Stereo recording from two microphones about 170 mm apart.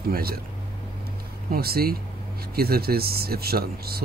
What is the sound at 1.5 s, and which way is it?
Speech, 65° right (ahead or behind).